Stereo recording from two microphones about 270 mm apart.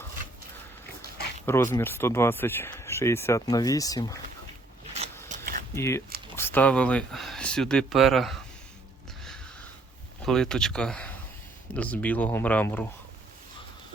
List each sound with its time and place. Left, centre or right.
1.5 s speech: centre
5.3 s a sound: right
5.7 s speech: centre
10.2 s speech: centre